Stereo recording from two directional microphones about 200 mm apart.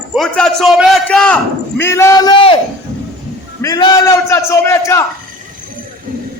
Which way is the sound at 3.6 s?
20° left (ahead or behind).